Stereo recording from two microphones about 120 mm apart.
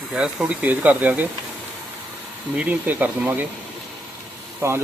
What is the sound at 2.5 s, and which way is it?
Speech, 15° right (ahead or behind).